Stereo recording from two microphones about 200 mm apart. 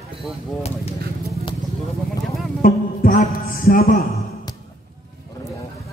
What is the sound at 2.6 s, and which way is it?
Music, 45° left (ahead or behind).